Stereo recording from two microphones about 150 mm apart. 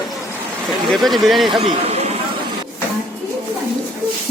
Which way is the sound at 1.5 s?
40° right (ahead or behind).